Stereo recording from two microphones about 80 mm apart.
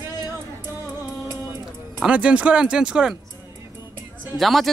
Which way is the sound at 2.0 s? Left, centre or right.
Centre.